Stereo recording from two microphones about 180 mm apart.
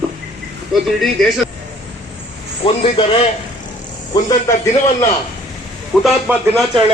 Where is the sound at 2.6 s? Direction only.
30° left (ahead or behind).